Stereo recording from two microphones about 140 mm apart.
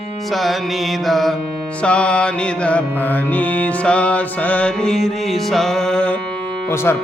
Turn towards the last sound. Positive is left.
turn(degrees=15)  # may be behind; listen again after turning